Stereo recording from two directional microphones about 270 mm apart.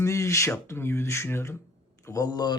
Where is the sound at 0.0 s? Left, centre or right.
Centre.